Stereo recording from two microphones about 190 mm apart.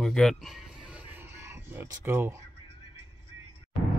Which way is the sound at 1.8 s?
15° right (ahead or behind).